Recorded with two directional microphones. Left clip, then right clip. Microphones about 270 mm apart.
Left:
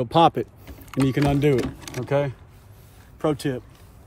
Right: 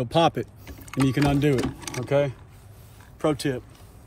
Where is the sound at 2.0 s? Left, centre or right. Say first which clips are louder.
Right 1 dB; left.